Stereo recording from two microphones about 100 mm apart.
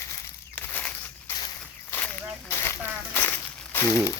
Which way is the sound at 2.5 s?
30° left (ahead or behind).